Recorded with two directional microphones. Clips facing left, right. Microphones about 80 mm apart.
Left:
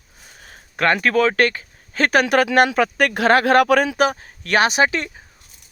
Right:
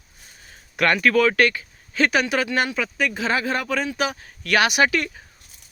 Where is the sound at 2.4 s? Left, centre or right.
Left.